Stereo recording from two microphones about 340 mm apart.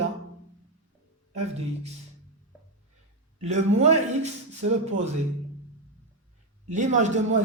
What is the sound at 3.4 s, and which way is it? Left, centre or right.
Speech, centre.